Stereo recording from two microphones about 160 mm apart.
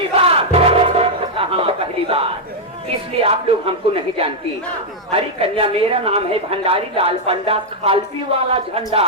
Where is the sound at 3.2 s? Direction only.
35° right (ahead or behind).